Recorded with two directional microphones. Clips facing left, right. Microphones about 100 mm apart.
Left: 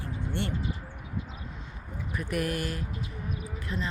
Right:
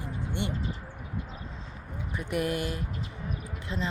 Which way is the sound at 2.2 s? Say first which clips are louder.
Right 1 dB; 20° right (ahead or behind).